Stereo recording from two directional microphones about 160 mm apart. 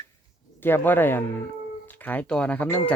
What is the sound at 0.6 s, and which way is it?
Speech, 10° left (ahead or behind).